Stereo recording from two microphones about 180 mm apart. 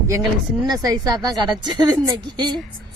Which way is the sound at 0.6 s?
20° right (ahead or behind).